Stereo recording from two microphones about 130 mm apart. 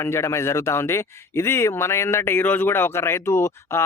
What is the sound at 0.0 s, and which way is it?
Speech, 20° left (ahead or behind).